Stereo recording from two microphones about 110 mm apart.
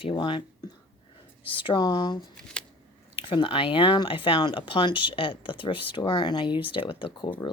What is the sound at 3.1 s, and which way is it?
Speech, 55° left (ahead or behind).